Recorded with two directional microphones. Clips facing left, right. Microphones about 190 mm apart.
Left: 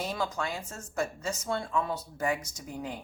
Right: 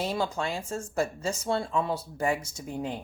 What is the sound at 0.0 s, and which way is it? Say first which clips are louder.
Speech: right 3 dB; 25° right (ahead or behind).